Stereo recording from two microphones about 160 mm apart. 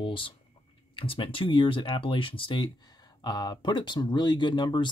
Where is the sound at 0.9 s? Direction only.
35° left (ahead or behind).